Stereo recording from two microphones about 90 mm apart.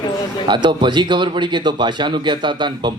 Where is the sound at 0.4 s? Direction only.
60° right (ahead or behind).